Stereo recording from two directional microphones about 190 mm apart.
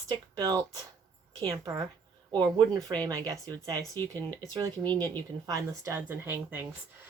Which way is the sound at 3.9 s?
10° left (ahead or behind).